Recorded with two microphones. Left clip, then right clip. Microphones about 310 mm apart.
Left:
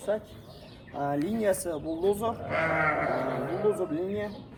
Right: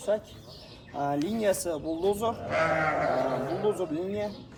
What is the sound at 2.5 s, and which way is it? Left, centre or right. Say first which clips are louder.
Speech: even; right.